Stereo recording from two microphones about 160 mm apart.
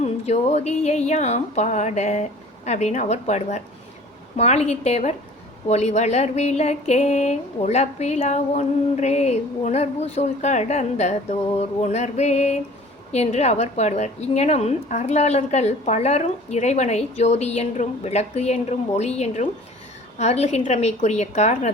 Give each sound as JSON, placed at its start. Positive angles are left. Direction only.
{"t": 0.0, "sound": "a woman's voice", "side_deg": 45}